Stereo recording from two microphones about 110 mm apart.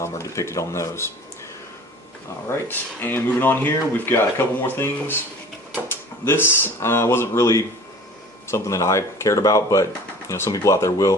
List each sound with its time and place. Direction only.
0.0 s speech: 25° left (ahead or behind)
2.5 s speech: 20° left (ahead or behind)